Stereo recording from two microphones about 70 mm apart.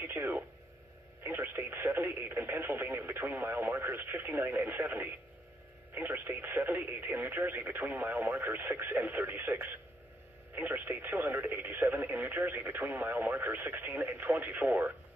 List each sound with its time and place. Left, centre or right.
0.0 s speech: right
1.4 s radio: right
1.8 s speech: right
6.5 s speech: right
6.8 s speech: right
12.0 s speech: right
14.0 s speech: right
14.4 s speech: right